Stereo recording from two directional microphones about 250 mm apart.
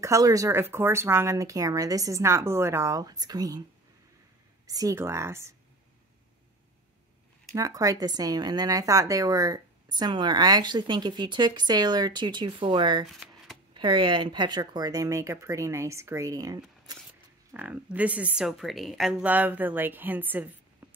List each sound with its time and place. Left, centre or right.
0.0 s a woman's voice: centre
4.6 s a woman's voice: centre
7.5 s a woman's voice: centre
13.1 s shuffling cards: centre
13.7 s a woman's voice: centre
20.8 s a sound: centre